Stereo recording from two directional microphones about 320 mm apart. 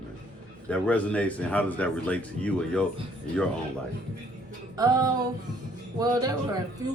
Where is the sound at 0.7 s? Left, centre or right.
Centre.